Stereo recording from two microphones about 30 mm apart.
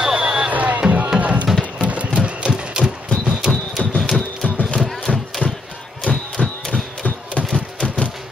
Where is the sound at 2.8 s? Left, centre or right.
Centre.